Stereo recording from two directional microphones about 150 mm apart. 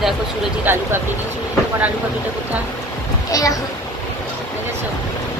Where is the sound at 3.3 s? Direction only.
25° left (ahead or behind).